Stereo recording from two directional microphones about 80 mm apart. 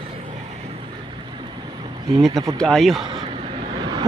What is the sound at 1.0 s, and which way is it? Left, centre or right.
Vehicle, right.